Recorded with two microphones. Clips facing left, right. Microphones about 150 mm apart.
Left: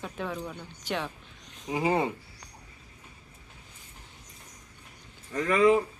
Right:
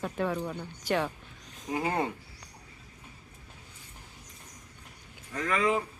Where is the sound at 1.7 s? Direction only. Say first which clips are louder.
Left 3 dB; 10° left (ahead or behind).